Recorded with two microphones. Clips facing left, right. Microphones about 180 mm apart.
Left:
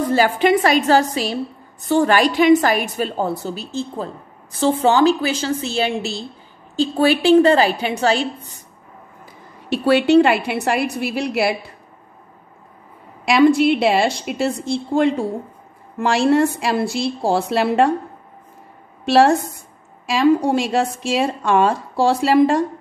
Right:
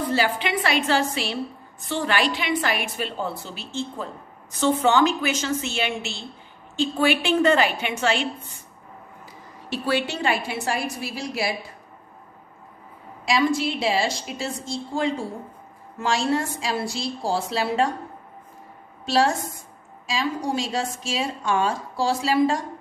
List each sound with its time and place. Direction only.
0.1 s a woman's voice: 45° left (ahead or behind)
9.7 s a woman's voice: 65° left (ahead or behind)
13.2 s a woman's voice: 60° left (ahead or behind)
19.0 s a woman's voice: 60° left (ahead or behind)